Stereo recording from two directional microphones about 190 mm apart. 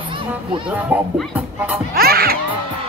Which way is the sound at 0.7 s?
10° right (ahead or behind).